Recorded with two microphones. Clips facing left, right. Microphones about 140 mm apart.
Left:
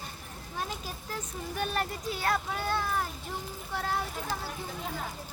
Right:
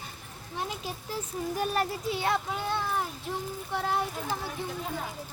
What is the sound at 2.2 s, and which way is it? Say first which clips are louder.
A child's voice: left 1 dB; 20° right (ahead or behind).